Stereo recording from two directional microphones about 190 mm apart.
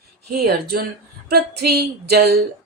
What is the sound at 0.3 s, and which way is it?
Speech, 55° right (ahead or behind).